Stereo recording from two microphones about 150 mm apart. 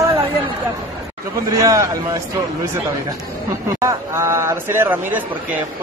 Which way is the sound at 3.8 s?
20° right (ahead or behind).